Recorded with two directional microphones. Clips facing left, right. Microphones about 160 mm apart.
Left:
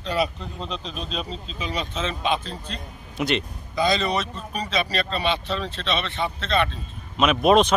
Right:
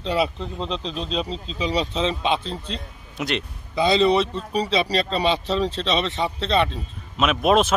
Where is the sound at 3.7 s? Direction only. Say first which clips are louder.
Right 5 dB; 25° right (ahead or behind).